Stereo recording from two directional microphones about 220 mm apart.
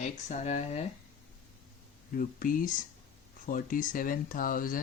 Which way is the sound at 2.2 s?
40° left (ahead or behind).